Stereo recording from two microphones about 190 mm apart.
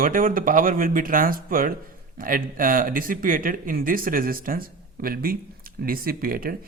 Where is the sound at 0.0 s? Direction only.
45° right (ahead or behind).